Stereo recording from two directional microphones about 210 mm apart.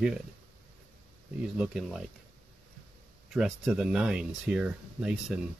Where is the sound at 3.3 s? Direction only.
Centre (ahead or behind).